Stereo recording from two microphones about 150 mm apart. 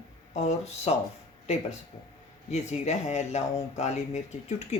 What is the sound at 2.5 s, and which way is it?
Speech, 50° left (ahead or behind).